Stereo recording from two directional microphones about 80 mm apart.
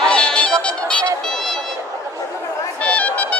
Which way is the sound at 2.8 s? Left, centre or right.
Centre.